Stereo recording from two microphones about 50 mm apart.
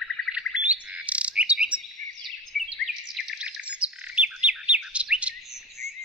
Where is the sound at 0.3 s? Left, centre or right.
Centre.